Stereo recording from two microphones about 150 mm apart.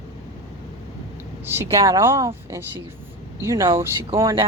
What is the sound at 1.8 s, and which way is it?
Speech, 20° right (ahead or behind).